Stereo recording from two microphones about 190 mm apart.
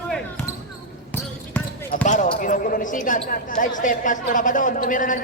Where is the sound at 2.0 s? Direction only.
40° left (ahead or behind).